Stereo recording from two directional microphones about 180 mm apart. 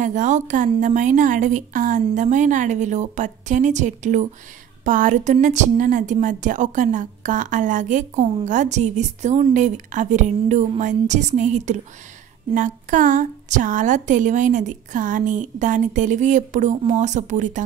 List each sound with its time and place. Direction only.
0.0 s a woman's voice: 45° right (ahead or behind)